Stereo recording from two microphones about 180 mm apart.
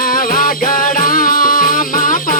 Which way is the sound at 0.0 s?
50° left (ahead or behind).